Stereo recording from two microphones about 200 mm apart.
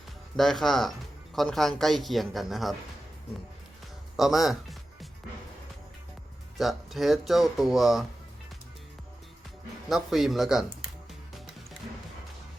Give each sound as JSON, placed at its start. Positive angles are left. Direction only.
{"t": 0.3, "sound": "speech", "side_deg": 0}
{"t": 4.2, "sound": "speech", "side_deg": 0}
{"t": 6.6, "sound": "speech", "side_deg": 0}
{"t": 9.9, "sound": "speech", "side_deg": 0}